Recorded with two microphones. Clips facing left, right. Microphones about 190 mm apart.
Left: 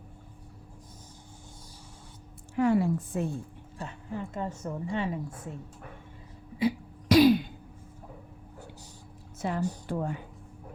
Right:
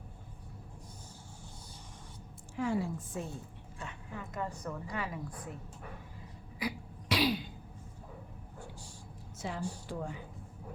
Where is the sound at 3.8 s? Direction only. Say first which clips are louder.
Left 7 dB; 35° left (ahead or behind).